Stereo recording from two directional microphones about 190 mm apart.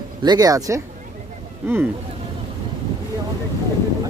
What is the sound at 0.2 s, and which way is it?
Speech, 20° right (ahead or behind).